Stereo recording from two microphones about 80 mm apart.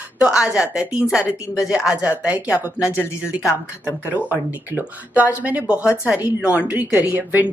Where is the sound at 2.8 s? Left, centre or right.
Left.